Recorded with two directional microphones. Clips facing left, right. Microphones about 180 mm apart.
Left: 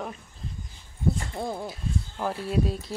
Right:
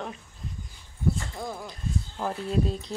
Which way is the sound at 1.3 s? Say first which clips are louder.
Left 4 dB; 30° left (ahead or behind).